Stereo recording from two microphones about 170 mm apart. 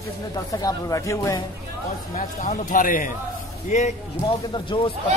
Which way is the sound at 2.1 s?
55° left (ahead or behind).